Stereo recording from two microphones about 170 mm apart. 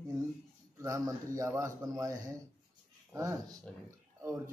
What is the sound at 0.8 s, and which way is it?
A man's voice, 20° right (ahead or behind).